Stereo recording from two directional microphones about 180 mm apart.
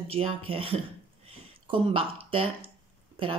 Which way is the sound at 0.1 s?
30° right (ahead or behind).